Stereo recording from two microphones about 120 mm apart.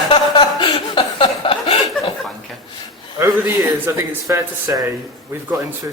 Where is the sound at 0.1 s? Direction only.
40° left (ahead or behind).